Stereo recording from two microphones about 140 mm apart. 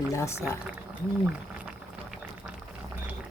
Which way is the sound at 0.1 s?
20° left (ahead or behind).